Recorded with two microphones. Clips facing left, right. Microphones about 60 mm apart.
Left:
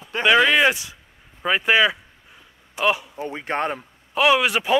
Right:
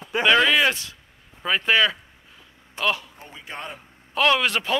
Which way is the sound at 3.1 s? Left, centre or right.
Left.